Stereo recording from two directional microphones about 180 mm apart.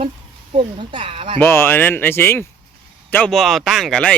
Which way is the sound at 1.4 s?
10° left (ahead or behind).